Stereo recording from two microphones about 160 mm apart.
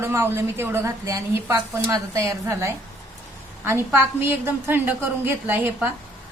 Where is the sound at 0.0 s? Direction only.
15° right (ahead or behind).